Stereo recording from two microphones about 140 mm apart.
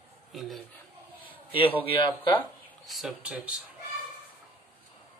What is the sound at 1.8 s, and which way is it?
Speech, 40° left (ahead or behind).